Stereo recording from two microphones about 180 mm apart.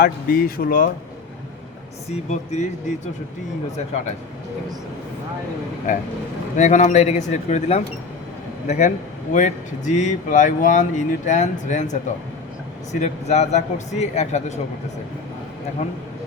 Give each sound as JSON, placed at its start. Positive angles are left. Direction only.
{"t": 0.0, "sound": "speech", "side_deg": 55}
{"t": 2.0, "sound": "a man's voice", "side_deg": 40}
{"t": 5.9, "sound": "a man's voice", "side_deg": 45}